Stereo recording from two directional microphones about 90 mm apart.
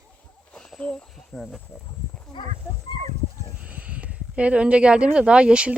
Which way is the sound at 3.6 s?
15° right (ahead or behind).